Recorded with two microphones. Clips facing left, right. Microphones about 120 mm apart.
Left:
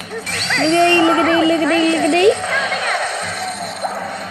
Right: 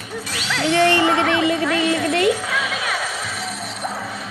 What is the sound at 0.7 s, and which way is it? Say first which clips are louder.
Speech: left 4 dB; 25° left (ahead or behind).